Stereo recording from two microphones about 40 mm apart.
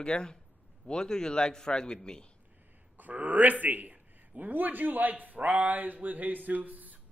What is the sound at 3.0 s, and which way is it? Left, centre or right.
A man's voice, right.